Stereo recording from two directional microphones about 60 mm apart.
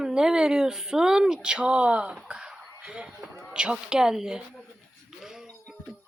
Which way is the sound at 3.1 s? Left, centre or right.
Right.